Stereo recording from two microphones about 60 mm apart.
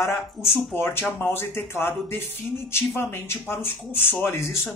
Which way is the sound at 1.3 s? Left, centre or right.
Left.